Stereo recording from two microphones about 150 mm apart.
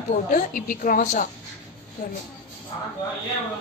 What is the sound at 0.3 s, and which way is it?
A woman's voice, 65° left (ahead or behind).